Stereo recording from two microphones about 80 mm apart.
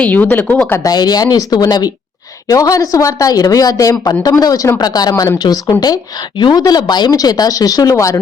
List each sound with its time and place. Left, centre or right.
0.0 s speech: left
0.4 s speech: centre
0.8 s a woman's voice: left